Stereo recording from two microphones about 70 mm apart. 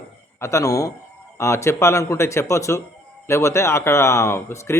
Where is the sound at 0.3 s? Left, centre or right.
Left.